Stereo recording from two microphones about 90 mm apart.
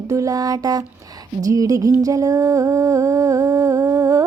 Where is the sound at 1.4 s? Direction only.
40° right (ahead or behind).